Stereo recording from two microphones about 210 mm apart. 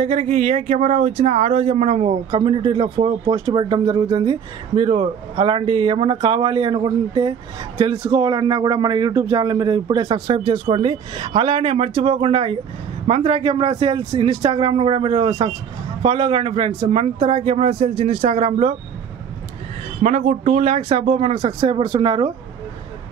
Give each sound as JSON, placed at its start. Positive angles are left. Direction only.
{"t": 0.0, "sound": "speech", "side_deg": -30}
{"t": 20.0, "sound": "speech", "side_deg": -35}